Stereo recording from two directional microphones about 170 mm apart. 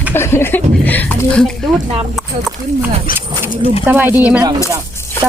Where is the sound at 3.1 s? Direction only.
55° left (ahead or behind).